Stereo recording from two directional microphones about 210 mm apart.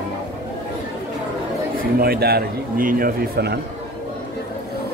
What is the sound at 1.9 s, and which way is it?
A man's voice, 45° right (ahead or behind).